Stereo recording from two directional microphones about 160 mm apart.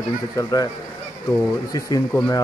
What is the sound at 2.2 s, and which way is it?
Speech, 20° left (ahead or behind).